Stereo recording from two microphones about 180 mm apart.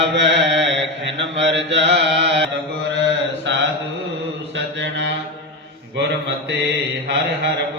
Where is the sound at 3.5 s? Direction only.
85° right.